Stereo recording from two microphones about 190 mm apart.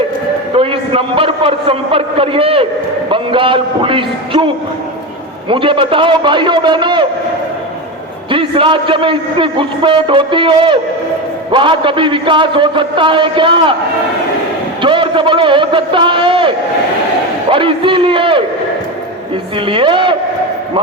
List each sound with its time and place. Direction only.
0.5 s a man's voice: 30° right (ahead or behind)
8.3 s a man's voice: 25° right (ahead or behind)
14.8 s a man's voice: 25° right (ahead or behind)
19.6 s a man's voice: 25° right (ahead or behind)